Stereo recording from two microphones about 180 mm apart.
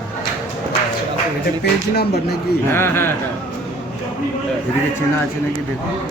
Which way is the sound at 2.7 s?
15° left (ahead or behind).